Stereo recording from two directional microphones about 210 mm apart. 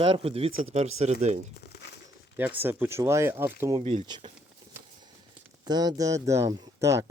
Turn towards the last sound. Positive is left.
turn(degrees=-15)  # may be behind; listen again after turning